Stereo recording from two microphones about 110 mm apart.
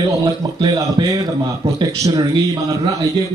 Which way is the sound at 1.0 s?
40° right (ahead or behind).